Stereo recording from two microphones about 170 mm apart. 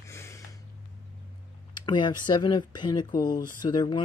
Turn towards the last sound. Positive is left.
turn(degrees=25)  # may be behind; listen again after turning